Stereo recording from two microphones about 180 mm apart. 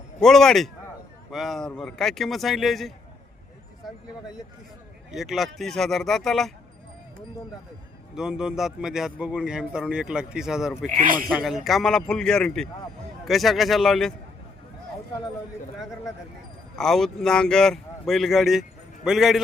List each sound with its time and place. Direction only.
0.2 s a man's voice: 5° left (ahead or behind)
5.1 s a man's voice: centre (ahead or behind)
8.1 s a man's voice: 5° right (ahead or behind)
10.9 s speech: 50° right (ahead or behind)
11.3 s a man's voice: centre (ahead or behind)
16.7 s a man's voice: centre (ahead or behind)